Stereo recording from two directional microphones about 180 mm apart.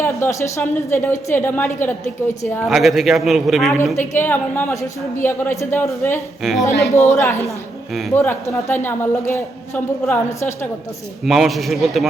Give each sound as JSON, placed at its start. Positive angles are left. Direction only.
{"t": 0.0, "sound": "a woman's voice", "side_deg": 15}
{"t": 2.6, "sound": "a man's voice", "side_deg": 0}
{"t": 4.1, "sound": "a woman's voice", "side_deg": 10}
{"t": 6.4, "sound": "a man's voice", "side_deg": 0}
{"t": 6.9, "sound": "a woman's voice", "side_deg": 15}
{"t": 11.3, "sound": "a man's voice", "side_deg": 0}